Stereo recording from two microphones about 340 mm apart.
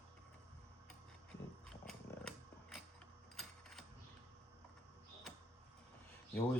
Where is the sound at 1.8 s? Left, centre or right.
Centre.